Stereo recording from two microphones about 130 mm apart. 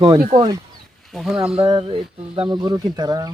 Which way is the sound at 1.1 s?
Centre (ahead or behind).